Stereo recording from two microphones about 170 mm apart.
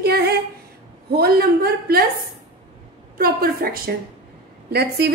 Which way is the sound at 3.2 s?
60° right (ahead or behind).